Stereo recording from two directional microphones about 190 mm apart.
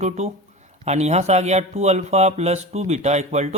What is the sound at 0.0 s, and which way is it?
A man's voice, 35° right (ahead or behind).